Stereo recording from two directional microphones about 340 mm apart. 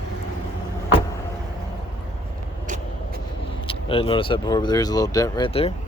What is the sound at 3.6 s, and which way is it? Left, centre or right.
Speech, centre.